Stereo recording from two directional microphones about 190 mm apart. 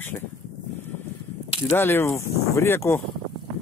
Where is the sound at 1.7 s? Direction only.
10° left (ahead or behind).